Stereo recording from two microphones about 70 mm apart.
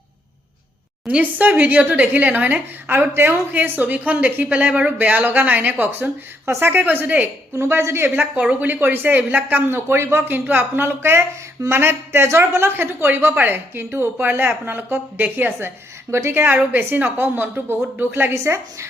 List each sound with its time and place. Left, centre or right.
1.0 s speech: right
7.5 s speech: right
8.1 s speech: right
18.3 s a woman's voice: right